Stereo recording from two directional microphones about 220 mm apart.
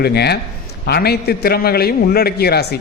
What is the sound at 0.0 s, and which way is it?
A man's voice, 45° left (ahead or behind).